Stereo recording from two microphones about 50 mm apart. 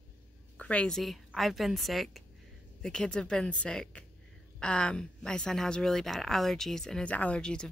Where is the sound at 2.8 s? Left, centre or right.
Centre.